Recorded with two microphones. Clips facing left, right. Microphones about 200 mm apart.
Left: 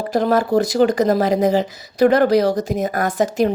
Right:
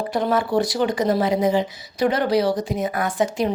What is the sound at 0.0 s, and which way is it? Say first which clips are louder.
Speech: left 4 dB; 40° left (ahead or behind).